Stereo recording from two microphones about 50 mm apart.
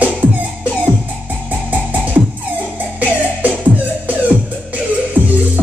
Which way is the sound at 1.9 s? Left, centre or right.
Right.